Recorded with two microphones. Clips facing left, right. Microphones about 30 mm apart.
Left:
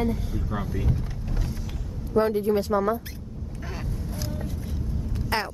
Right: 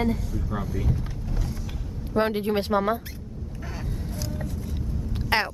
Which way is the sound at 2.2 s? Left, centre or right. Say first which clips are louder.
Left 2 dB; right.